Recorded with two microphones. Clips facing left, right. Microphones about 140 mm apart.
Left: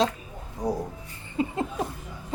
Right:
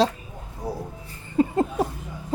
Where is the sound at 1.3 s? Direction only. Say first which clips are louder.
Right 6 dB; 40° right (ahead or behind).